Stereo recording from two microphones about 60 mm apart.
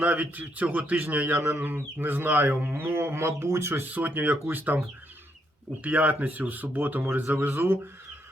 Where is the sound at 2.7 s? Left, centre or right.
Right.